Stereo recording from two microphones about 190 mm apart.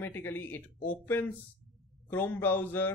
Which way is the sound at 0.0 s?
10° left (ahead or behind).